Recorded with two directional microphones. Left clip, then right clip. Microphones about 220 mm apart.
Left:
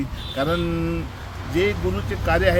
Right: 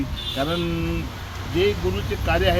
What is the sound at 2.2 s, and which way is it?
Speech, 15° left (ahead or behind).